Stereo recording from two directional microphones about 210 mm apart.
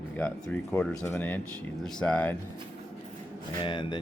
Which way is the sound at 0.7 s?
5° left (ahead or behind).